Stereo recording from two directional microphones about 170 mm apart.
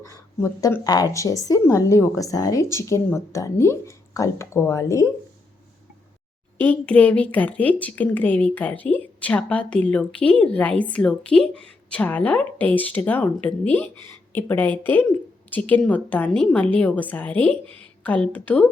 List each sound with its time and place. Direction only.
0.0 s a woman's voice: 15° left (ahead or behind)
6.6 s a woman's voice: 10° left (ahead or behind)